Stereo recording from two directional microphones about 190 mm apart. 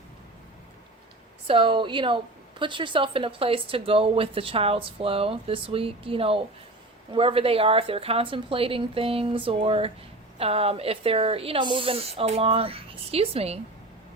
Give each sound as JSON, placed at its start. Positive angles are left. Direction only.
{"t": 1.5, "sound": "a woman's voice", "side_deg": -25}